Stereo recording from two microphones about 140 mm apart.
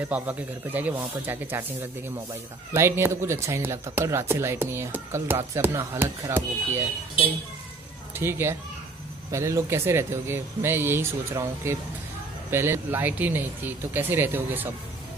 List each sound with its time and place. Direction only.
0.1 s speech: 10° right (ahead or behind)